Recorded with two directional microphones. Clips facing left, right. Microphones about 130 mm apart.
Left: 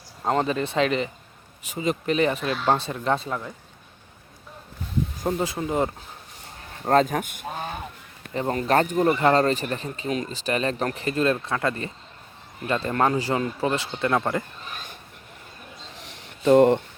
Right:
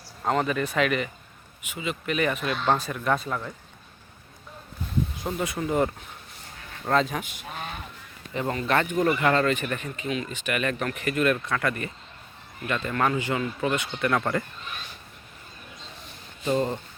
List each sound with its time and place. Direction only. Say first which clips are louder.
0.2 s speech: left 1 dB; 25° left (ahead or behind)
1.6 s speech: left 6 dB; 40° left (ahead or behind); by 3.5 s 20° left (ahead or behind)
5.4 s speech: right 2 dB; 25° left (ahead or behind)
6.8 s a man's voice: left 4 dB; 45° left (ahead or behind)
7.4 s honk: left 4 dB; 30° left (ahead or behind)
8.3 s speech: left 3 dB; 35° left (ahead or behind); by 14.4 s 20° left (ahead or behind)
16.0 s a sound: left 3 dB; 90° left; by 16.8 s 70° left (ahead or behind)